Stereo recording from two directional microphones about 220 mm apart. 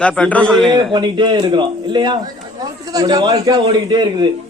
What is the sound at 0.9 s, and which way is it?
A man's voice, 20° right (ahead or behind).